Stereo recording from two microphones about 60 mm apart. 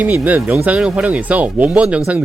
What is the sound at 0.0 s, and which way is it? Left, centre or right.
Speech, right.